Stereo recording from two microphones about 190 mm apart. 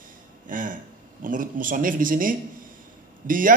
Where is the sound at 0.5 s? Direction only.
45° right (ahead or behind).